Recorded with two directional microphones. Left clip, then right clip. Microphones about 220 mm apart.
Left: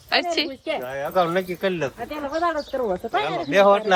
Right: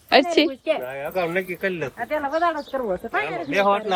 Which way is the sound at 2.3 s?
25° right (ahead or behind).